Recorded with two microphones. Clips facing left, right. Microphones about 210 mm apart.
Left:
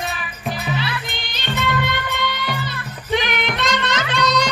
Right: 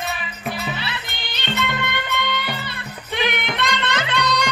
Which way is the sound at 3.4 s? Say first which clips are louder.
Left 2 dB; 60° right (ahead or behind).